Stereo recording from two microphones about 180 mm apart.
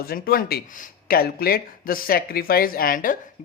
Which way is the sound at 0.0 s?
55° left (ahead or behind).